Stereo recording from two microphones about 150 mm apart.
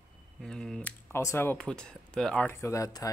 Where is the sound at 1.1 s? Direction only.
15° left (ahead or behind).